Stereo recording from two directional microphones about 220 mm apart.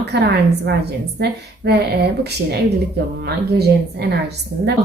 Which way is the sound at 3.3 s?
50° right (ahead or behind).